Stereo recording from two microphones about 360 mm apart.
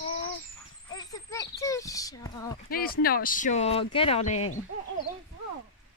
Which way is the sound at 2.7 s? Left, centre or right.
Left.